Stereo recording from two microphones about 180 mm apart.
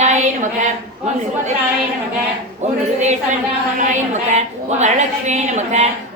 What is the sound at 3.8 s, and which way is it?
A woman's voice, 40° right (ahead or behind).